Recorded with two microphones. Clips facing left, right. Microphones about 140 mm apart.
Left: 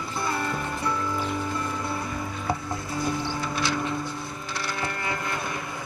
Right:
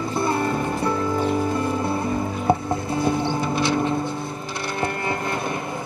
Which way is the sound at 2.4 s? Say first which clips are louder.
Right 9 dB; 25° right (ahead or behind).